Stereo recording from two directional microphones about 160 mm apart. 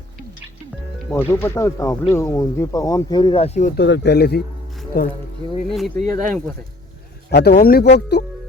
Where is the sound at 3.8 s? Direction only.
90° left.